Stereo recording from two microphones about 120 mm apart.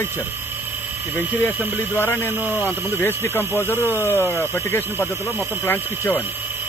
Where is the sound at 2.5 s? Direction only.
15° left (ahead or behind).